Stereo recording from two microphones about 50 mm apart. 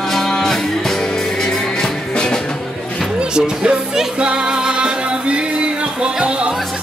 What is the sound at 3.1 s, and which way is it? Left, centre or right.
Music, centre.